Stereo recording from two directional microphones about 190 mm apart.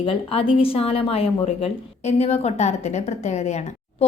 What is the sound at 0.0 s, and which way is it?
A woman's voice, 30° left (ahead or behind).